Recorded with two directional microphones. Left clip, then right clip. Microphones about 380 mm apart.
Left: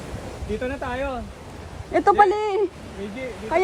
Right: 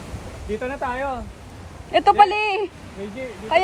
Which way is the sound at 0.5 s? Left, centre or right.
Centre.